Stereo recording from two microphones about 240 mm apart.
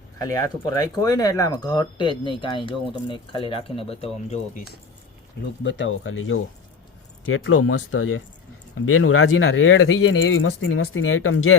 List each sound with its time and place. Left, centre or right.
0.2 s speech: centre
5.6 s speech: left